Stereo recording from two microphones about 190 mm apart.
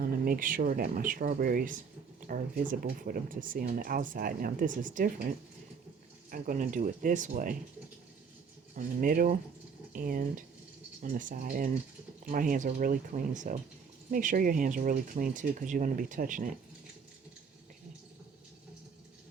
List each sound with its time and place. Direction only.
0.0 s speech: 50° right (ahead or behind)
6.3 s speech: 45° right (ahead or behind)
8.7 s speech: 45° right (ahead or behind)